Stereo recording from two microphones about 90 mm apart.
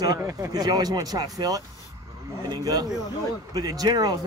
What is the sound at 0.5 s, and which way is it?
Speech, 50° right (ahead or behind).